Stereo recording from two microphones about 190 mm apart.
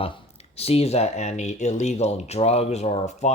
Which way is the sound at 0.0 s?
30° left (ahead or behind).